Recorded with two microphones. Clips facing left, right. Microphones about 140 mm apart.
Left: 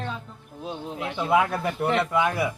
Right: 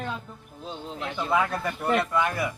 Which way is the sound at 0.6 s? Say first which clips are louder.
Left 3 dB; 15° left (ahead or behind).